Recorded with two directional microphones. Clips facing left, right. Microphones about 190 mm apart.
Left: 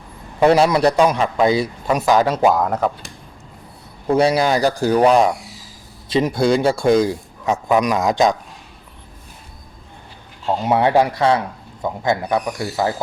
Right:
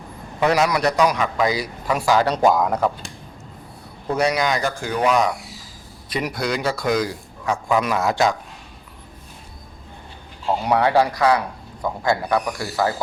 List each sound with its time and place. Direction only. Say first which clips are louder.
0.3 s a man's voice: left 5 dB; 30° left (ahead or behind)
2.3 s speech: left 1 dB; 5° left (ahead or behind)
4.1 s a man's voice: left 5 dB; 30° left (ahead or behind)
10.4 s a man's voice: left 2 dB; 25° left (ahead or behind)